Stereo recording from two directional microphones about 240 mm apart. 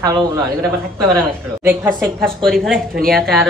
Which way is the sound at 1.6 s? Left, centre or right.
Centre.